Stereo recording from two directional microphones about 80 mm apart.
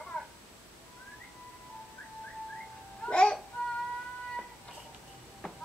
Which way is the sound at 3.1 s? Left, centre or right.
Centre.